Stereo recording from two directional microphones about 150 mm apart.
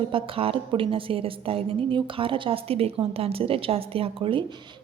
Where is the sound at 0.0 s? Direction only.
35° right (ahead or behind).